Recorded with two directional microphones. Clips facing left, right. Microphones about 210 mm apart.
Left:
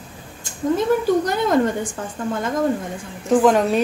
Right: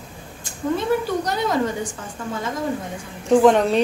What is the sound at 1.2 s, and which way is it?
Speech, 50° left (ahead or behind).